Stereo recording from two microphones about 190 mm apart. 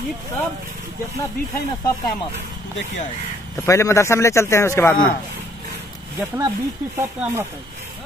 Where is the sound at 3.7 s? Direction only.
15° left (ahead or behind).